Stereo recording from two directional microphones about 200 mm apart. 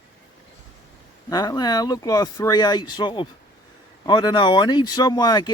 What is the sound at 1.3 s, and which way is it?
Speech, 20° left (ahead or behind).